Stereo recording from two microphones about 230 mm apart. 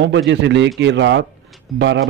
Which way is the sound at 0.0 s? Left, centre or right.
Right.